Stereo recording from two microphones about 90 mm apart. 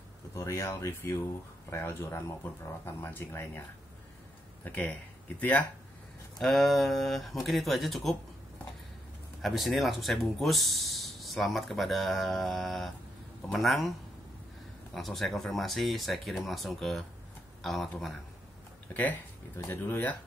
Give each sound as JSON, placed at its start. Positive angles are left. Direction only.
{"t": 0.3, "sound": "speech", "side_deg": 35}
{"t": 4.6, "sound": "speech", "side_deg": 20}
{"t": 6.3, "sound": "speech", "side_deg": 5}
{"t": 9.4, "sound": "speech", "side_deg": 0}
{"t": 18.9, "sound": "speech", "side_deg": 20}